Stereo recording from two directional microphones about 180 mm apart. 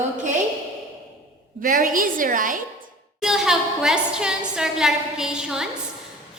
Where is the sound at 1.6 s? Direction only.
50° right (ahead or behind).